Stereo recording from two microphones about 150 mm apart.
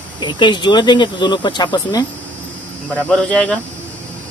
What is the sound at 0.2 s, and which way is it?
Speech, 30° left (ahead or behind).